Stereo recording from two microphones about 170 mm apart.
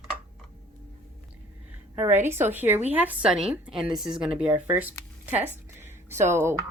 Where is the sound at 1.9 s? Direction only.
10° right (ahead or behind).